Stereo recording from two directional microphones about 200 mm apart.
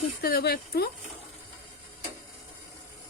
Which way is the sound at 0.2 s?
50° left (ahead or behind).